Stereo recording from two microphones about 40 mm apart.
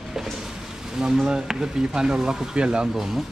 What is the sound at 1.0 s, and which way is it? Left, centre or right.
Speech, centre.